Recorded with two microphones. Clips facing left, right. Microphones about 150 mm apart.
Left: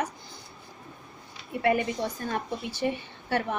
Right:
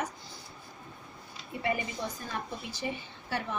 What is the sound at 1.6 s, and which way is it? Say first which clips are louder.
A woman's voice: left 7 dB; 65° left (ahead or behind).